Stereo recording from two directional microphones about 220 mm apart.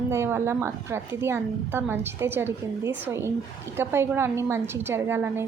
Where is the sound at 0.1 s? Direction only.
10° right (ahead or behind).